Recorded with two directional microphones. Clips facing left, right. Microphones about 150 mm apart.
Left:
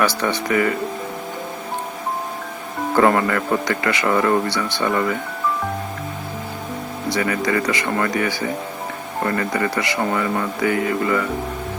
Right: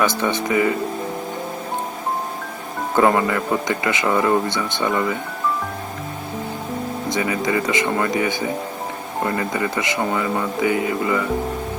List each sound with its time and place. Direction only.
0.0 s speech: 20° right (ahead or behind)
2.9 s speech: 15° right (ahead or behind)
7.1 s speech: 20° right (ahead or behind)